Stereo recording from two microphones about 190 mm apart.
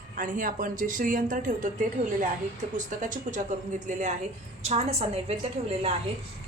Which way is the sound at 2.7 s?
40° right (ahead or behind).